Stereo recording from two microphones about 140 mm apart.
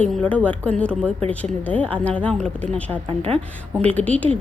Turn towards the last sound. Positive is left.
turn(degrees=10)  # may be behind; listen again after turning